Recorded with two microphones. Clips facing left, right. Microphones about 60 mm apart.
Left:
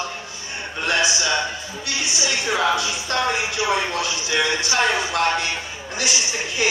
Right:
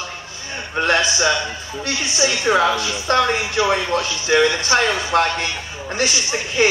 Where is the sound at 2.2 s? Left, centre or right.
Right.